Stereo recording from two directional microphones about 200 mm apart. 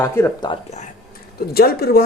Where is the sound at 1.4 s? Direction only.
50° left (ahead or behind).